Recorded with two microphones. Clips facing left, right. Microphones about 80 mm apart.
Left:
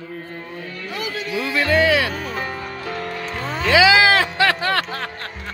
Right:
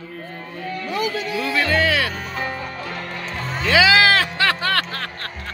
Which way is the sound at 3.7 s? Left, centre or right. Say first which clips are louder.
Left 1 dB; centre.